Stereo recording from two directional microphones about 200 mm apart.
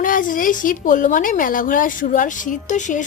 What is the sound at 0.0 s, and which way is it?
A woman's voice, 40° left (ahead or behind).